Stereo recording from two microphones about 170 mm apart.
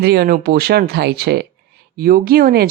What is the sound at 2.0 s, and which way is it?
Speech, 60° right (ahead or behind).